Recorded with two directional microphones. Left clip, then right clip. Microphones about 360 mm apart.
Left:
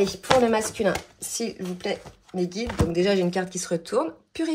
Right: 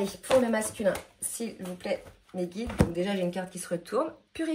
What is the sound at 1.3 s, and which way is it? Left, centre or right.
Speech, centre.